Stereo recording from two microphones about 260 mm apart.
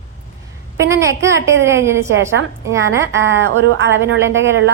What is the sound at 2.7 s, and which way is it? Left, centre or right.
A woman's voice, centre.